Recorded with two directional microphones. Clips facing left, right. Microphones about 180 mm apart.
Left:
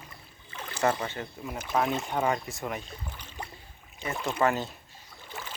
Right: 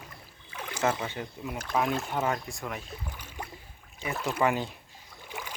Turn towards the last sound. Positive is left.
turn(degrees=-10)  # may be behind; listen again after turning